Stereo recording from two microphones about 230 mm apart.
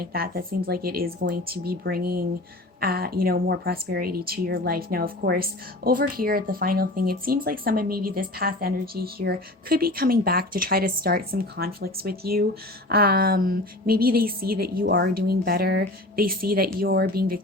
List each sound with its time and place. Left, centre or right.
0.0 s speech: right